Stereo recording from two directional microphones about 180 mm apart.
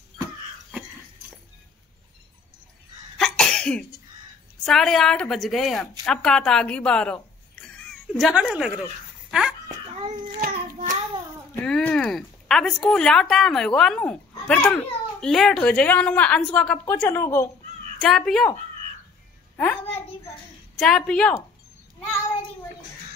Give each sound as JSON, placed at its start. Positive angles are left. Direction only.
{"t": 3.2, "sound": "cough", "side_deg": 5}
{"t": 4.6, "sound": "a woman's voice", "side_deg": 0}
{"t": 9.3, "sound": "dog", "side_deg": -5}
{"t": 10.4, "sound": "child singing", "side_deg": -50}
{"t": 11.6, "sound": "speech", "side_deg": 5}
{"t": 18.0, "sound": "a woman's voice", "side_deg": 0}
{"t": 19.5, "sound": "a child's voice", "side_deg": 10}